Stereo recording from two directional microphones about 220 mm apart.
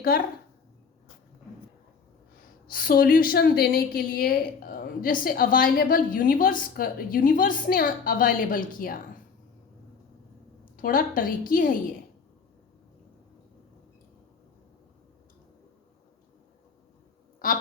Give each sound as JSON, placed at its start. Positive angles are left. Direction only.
{"t": 0.1, "sound": "a woman's voice", "side_deg": 40}
{"t": 2.6, "sound": "a woman's voice", "side_deg": 40}
{"t": 10.8, "sound": "a woman's voice", "side_deg": 40}
{"t": 17.4, "sound": "a sound", "side_deg": 40}